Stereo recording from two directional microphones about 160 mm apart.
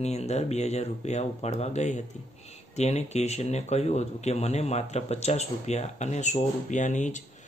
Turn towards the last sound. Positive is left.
turn(degrees=50)  # may be behind; listen again after turning